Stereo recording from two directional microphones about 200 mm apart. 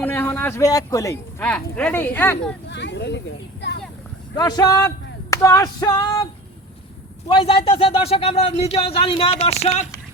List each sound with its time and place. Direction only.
0.0 s a man's voice: 10° left (ahead or behind)
2.6 s speech: 60° left (ahead or behind)
4.4 s speech: 20° left (ahead or behind)
7.3 s speech: 25° left (ahead or behind)